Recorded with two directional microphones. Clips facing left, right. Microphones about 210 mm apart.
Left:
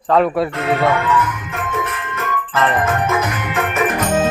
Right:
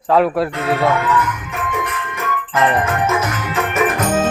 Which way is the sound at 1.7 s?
10° right (ahead or behind).